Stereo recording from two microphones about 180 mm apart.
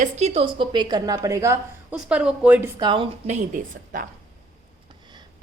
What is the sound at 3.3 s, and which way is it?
Speech, 45° right (ahead or behind).